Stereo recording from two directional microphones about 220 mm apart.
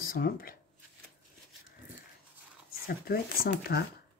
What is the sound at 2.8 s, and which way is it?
Speech, 45° left (ahead or behind).